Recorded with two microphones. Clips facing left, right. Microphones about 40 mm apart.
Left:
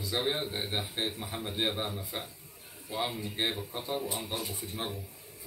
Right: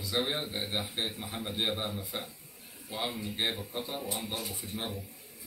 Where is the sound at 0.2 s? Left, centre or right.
Centre.